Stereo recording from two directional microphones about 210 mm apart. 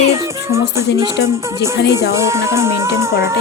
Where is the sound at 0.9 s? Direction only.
15° right (ahead or behind).